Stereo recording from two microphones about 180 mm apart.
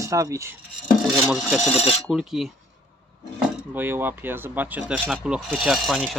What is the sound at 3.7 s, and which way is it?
Speech, 10° right (ahead or behind).